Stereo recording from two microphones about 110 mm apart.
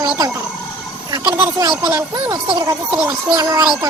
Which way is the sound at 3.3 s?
35° right (ahead or behind).